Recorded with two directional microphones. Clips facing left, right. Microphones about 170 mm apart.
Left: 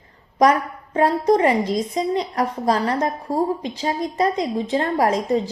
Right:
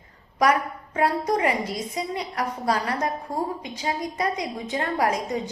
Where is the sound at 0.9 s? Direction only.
30° left (ahead or behind).